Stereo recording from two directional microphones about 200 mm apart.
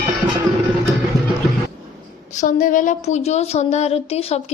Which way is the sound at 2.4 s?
40° left (ahead or behind).